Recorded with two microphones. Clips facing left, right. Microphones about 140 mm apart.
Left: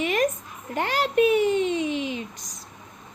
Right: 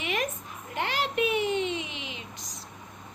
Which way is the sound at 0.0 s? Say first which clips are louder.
Left 8 dB; 40° left (ahead or behind).